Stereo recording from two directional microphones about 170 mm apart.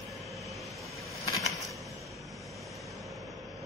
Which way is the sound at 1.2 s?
20° left (ahead or behind).